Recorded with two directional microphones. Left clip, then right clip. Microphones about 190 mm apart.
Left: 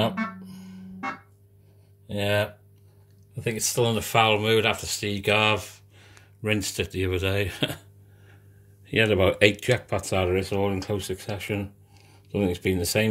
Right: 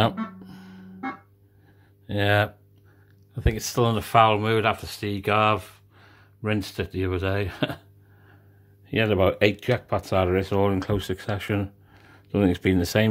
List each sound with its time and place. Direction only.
0.0 s music: 40° right (ahead or behind)
2.0 s speech: 35° right (ahead or behind); by 7.8 s 10° right (ahead or behind)
8.8 s speech: 10° right (ahead or behind); by 13.1 s 30° right (ahead or behind)